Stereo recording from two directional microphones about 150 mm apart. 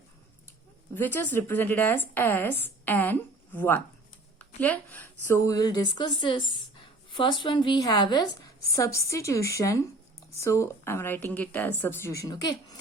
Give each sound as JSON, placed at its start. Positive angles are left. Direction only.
{"t": 0.9, "sound": "a woman's voice", "side_deg": 15}